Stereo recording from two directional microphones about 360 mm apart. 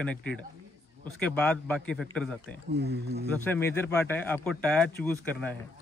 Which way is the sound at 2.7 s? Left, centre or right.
Right.